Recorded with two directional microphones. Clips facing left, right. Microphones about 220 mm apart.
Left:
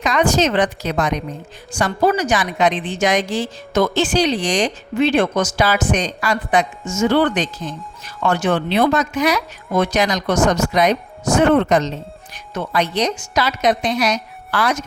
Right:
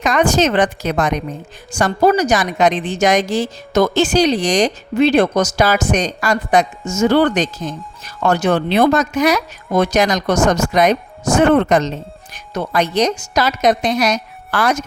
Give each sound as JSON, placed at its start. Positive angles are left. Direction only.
{"t": 0.0, "sound": "a woman's voice", "side_deg": -50}